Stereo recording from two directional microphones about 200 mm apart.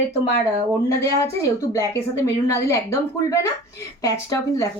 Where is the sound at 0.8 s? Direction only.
15° left (ahead or behind).